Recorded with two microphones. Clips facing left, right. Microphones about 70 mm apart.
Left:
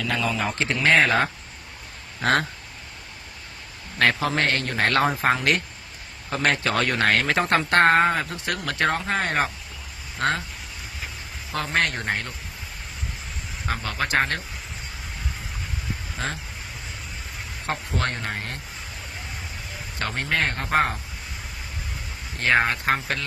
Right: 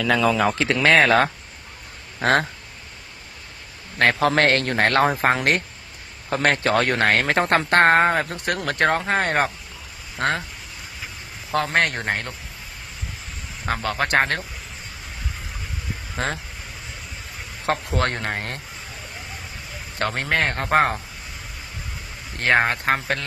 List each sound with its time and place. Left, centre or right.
0.7 s speech: right
2.2 s speech: right
4.2 s a man's voice: right
11.5 s a man's voice: right
13.7 s a man's voice: right
16.1 s a man's voice: right
17.7 s a man's voice: right
20.0 s a man's voice: right
22.4 s a man's voice: right